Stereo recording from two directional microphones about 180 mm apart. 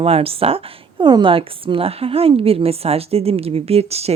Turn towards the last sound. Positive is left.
turn(degrees=-35)  # may be behind; listen again after turning